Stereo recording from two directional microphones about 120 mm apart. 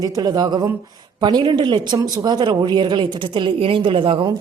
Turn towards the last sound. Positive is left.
turn(degrees=-45)  # may be behind; listen again after turning